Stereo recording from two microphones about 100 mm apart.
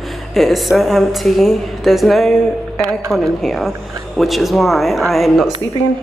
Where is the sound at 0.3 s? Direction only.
Centre (ahead or behind).